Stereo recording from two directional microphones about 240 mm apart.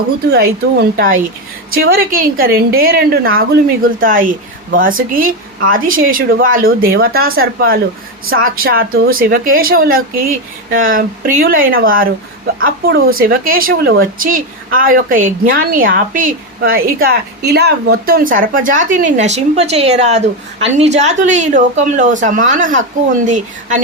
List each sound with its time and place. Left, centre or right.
0.3 s a woman's voice: right